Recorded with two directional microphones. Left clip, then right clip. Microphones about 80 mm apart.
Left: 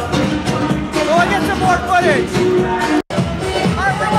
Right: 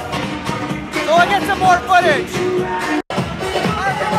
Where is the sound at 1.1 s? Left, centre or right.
Centre.